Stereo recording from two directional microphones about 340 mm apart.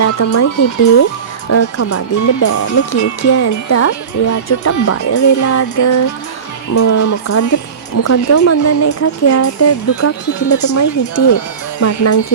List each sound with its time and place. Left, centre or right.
0.0 s speech: left
1.5 s speech: left